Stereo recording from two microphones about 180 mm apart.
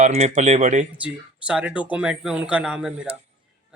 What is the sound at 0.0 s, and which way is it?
Speech, 40° right (ahead or behind).